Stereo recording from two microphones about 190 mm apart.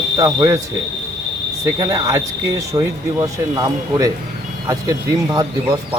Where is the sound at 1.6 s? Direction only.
20° right (ahead or behind).